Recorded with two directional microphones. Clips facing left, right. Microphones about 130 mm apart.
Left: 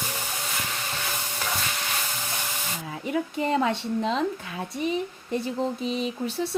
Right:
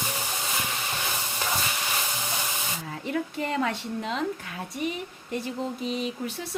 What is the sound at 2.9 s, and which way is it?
Speech, 15° left (ahead or behind).